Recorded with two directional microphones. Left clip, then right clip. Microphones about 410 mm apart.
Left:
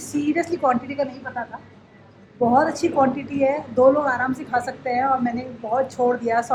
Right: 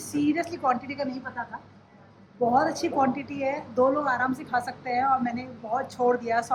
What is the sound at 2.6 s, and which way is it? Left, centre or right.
A woman's voice, centre.